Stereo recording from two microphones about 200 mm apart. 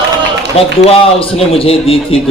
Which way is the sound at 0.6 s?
30° left (ahead or behind).